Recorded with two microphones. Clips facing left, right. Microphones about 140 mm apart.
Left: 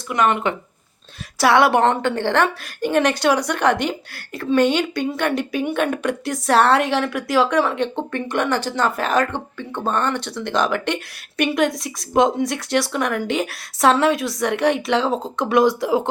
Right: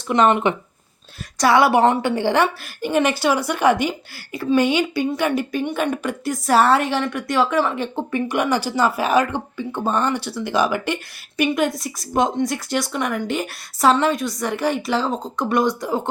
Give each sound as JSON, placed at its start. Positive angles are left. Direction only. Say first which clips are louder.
{"t": 0.1, "sound": "speech", "louder": "right 3 dB", "side_deg": -25}
{"t": 1.4, "sound": "a woman's voice", "louder": "even", "side_deg": 0}